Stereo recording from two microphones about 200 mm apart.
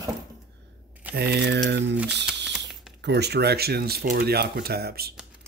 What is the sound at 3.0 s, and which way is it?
Speech, 55° right (ahead or behind).